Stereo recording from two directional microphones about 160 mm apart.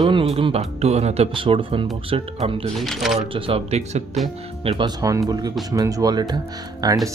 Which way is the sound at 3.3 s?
40° right (ahead or behind).